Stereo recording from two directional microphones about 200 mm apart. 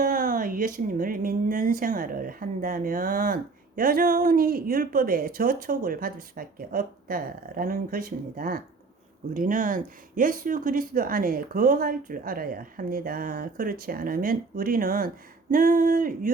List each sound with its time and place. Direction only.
0.0 s speech: 45° right (ahead or behind)